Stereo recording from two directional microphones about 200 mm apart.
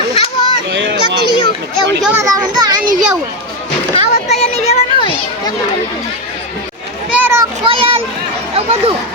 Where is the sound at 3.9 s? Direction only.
35° left (ahead or behind).